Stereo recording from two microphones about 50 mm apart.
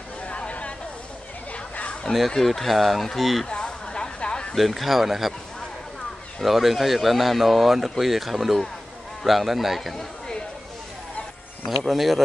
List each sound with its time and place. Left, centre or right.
0.3 s a sound: left
1.5 s chatter: left
2.1 s speech: centre
3.4 s a sound: centre
4.6 s speech: centre
6.4 s speech: centre
9.9 s chatter: centre
11.8 s speech: centre